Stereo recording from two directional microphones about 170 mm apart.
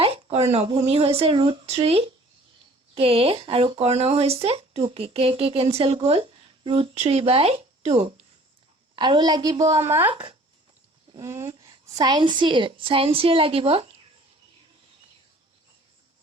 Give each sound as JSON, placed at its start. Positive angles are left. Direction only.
{"t": 0.0, "sound": "speech", "side_deg": -35}
{"t": 9.0, "sound": "a woman's voice", "side_deg": -25}
{"t": 10.1, "sound": "speech", "side_deg": -35}
{"t": 11.1, "sound": "a woman's voice", "side_deg": -20}